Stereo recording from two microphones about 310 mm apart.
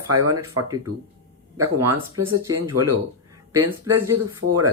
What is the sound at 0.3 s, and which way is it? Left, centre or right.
Speech, right.